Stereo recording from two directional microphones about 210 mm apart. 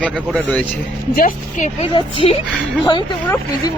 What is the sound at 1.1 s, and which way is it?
Speech, 40° left (ahead or behind).